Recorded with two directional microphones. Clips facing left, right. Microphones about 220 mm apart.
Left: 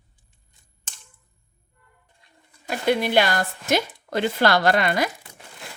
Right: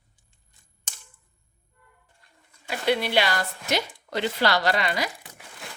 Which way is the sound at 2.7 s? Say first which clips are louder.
Left 3 dB; 45° left (ahead or behind).